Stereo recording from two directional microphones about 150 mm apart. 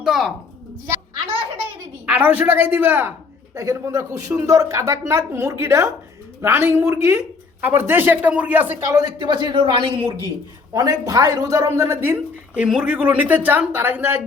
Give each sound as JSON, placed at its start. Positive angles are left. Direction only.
{"t": 0.0, "sound": "speech", "side_deg": -5}
{"t": 2.0, "sound": "a woman's voice", "side_deg": -10}
{"t": 9.0, "sound": "a man's voice", "side_deg": -30}
{"t": 10.8, "sound": "a woman's voice", "side_deg": -25}